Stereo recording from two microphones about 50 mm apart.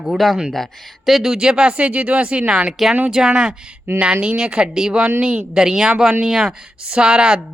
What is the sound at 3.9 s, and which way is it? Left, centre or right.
Speech, right.